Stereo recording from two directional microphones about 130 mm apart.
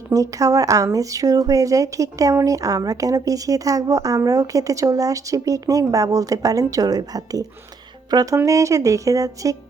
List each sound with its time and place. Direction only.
0.1 s speech: 25° right (ahead or behind)